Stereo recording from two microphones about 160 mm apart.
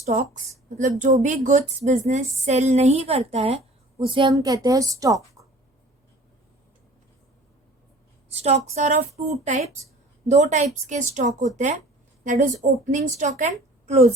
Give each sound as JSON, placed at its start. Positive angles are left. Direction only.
{"t": 0.0, "sound": "a woman's voice", "side_deg": -45}
{"t": 8.3, "sound": "a woman's voice", "side_deg": -40}